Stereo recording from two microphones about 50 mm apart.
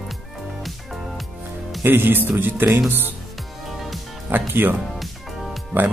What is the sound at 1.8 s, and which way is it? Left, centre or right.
Speech, right.